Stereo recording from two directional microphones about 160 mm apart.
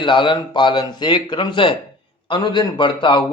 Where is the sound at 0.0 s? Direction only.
30° left (ahead or behind).